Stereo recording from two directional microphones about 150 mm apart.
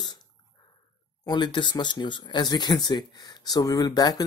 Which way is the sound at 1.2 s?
30° left (ahead or behind).